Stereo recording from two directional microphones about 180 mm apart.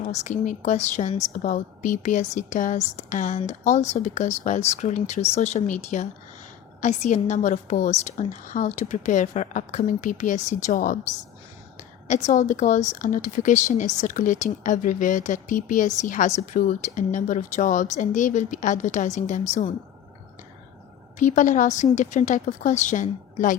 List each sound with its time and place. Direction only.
0.0 s a woman's voice: 40° left (ahead or behind)
21.2 s speech: 45° left (ahead or behind)